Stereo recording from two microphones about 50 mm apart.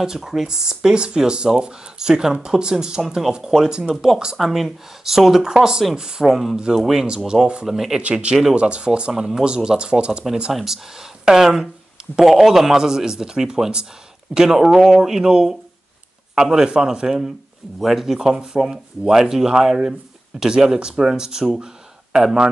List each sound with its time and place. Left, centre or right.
0.0 s speech: centre
3.9 s speech: centre
7.2 s speech: centre
7.6 s speech: centre
8.0 s speech: right
10.5 s speech: centre